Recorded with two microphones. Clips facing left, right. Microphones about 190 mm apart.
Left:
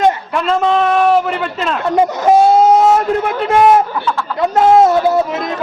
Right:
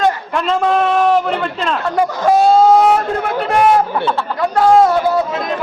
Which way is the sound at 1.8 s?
20° left (ahead or behind).